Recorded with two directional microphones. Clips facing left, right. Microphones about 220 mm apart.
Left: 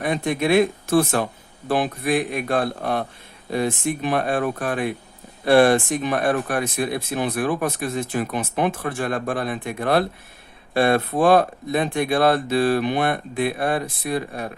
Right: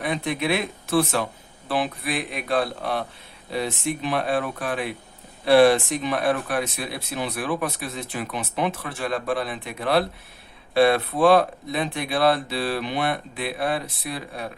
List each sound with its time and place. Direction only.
0.0 s speech: 45° left (ahead or behind)